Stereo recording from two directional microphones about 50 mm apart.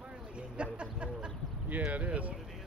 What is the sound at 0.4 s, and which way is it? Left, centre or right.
Speech, right.